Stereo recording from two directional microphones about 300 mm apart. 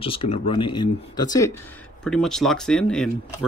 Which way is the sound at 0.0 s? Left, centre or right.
Centre.